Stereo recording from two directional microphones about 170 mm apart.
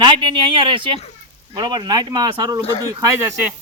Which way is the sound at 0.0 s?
30° right (ahead or behind).